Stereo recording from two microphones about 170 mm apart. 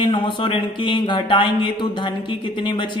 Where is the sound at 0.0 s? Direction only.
30° left (ahead or behind).